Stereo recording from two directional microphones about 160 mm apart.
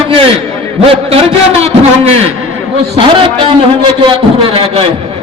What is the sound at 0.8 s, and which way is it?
A man's voice, 40° right (ahead or behind).